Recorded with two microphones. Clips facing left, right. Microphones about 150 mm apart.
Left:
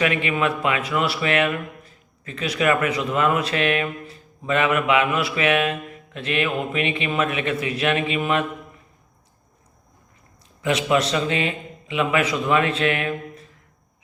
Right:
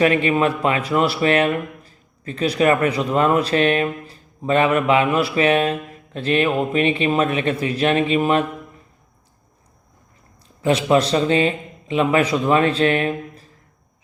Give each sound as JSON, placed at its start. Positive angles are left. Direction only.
{"t": 0.0, "sound": "speech", "side_deg": -35}
{"t": 10.6, "sound": "a man's voice", "side_deg": -35}